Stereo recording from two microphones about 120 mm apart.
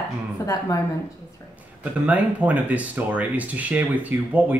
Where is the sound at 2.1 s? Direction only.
10° right (ahead or behind).